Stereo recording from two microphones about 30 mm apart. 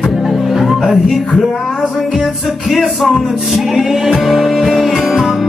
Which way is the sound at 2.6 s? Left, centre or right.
Centre.